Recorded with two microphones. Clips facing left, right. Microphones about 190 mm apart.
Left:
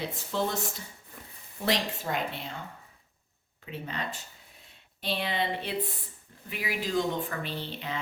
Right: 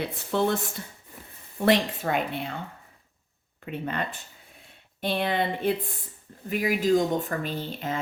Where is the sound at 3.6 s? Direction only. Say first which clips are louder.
Right 6 dB; 55° right (ahead or behind).